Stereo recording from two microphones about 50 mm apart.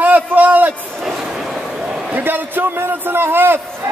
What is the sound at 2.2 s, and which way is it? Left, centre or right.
A man's voice, right.